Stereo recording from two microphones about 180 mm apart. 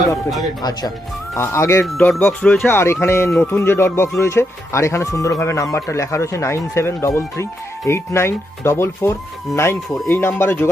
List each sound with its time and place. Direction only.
0.6 s speech: 25° left (ahead or behind)
1.8 s speech: 5° left (ahead or behind)